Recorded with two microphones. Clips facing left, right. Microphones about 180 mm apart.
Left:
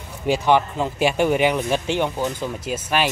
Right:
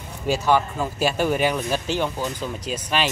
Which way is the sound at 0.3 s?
20° left (ahead or behind).